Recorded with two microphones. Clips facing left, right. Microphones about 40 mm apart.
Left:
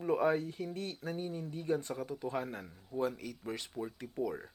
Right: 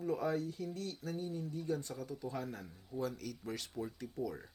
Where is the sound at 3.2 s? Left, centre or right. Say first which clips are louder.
Left 2 dB; left.